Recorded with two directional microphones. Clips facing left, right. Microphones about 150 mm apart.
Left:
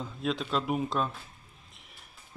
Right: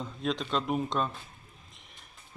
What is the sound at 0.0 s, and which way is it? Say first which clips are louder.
Speech: even; centre (ahead or behind).